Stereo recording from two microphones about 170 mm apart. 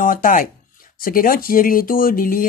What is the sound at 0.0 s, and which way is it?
Speech, 55° left (ahead or behind).